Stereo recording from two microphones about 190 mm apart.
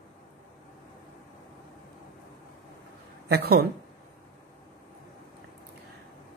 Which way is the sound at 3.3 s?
55° right (ahead or behind).